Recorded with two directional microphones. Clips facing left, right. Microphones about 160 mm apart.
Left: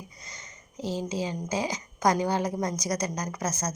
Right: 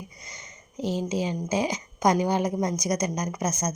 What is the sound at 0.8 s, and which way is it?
A woman's voice, 15° right (ahead or behind).